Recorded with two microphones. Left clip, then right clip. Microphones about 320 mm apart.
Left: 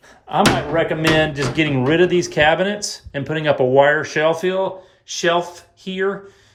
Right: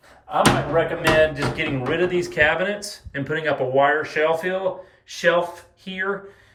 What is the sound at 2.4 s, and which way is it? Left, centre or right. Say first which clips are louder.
Speech: left 3 dB; centre.